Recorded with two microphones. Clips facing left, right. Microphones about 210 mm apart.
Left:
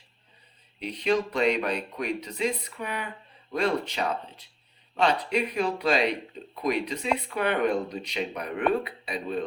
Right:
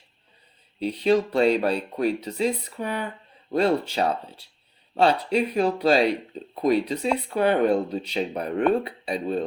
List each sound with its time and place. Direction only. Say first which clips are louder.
0.8 s speech: right 5 dB; 30° right (ahead or behind)